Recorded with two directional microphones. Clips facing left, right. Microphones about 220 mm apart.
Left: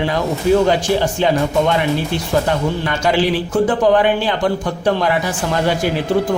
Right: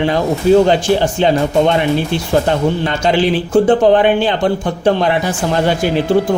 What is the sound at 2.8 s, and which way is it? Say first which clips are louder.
A man's voice: right 2 dB; 25° right (ahead or behind).